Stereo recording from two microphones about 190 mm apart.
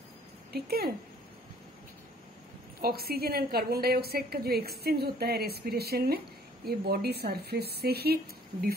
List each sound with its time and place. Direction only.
0.7 s speech: 55° right (ahead or behind)
2.8 s a woman's voice: 55° right (ahead or behind)